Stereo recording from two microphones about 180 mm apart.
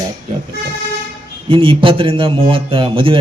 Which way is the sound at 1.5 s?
30° right (ahead or behind).